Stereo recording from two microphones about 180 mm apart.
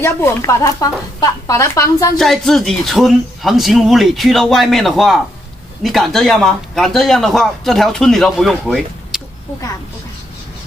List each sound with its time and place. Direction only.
0.0 s speech: 15° left (ahead or behind)
2.1 s a man's voice: centre (ahead or behind)